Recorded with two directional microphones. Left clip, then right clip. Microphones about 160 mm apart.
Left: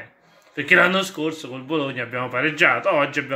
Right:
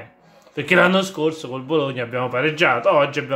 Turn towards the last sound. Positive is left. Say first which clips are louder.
# right 3 dB
turn(degrees=-10)  # may be behind; listen again after turning